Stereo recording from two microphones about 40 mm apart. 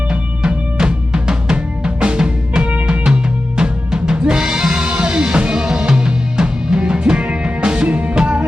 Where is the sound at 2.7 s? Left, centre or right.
Right.